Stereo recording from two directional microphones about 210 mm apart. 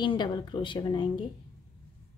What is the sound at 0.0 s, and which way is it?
A woman's voice, 20° left (ahead or behind).